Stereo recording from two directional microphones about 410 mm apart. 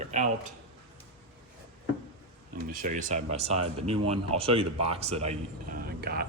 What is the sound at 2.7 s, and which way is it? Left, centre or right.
Speech, right.